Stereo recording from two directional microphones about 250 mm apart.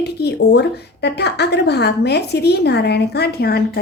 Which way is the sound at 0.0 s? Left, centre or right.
Left.